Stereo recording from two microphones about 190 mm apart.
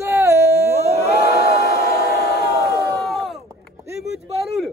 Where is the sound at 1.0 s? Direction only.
55° left (ahead or behind).